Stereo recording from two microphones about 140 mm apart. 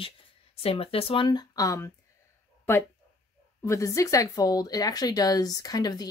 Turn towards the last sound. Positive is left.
turn(degrees=30)  # may be behind; listen again after turning